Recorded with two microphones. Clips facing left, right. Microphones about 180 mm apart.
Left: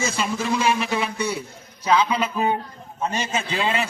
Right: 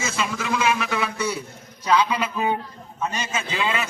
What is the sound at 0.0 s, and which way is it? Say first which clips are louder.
A man's voice: left 2 dB; 35° left (ahead or behind).